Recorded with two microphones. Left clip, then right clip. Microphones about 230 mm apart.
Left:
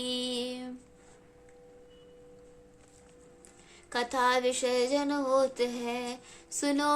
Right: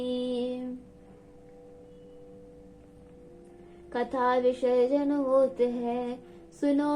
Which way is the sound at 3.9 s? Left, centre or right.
Left.